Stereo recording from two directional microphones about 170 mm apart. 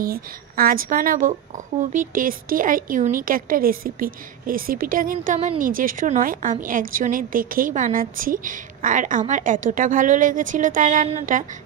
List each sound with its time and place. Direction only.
0.0 s a woman's voice: 60° right (ahead or behind)